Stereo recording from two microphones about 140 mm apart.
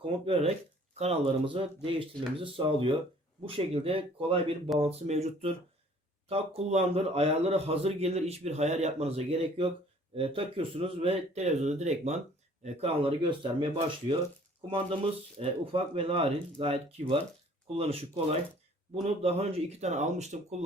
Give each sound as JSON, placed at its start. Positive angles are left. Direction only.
{"t": 0.0, "sound": "a man's voice", "side_deg": -40}
{"t": 15.4, "sound": "a man's voice", "side_deg": -40}